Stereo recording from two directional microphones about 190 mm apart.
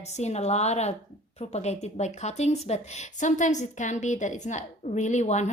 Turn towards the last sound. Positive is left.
turn(degrees=40)  # may be behind; listen again after turning